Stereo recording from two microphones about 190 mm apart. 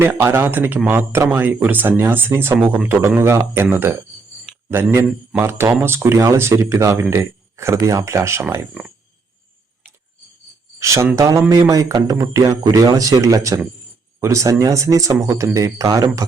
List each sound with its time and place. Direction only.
0.0 s speech: 10° right (ahead or behind)
10.8 s speech: 15° right (ahead or behind)